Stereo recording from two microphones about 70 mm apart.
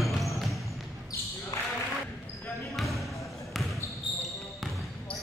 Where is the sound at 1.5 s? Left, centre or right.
Left.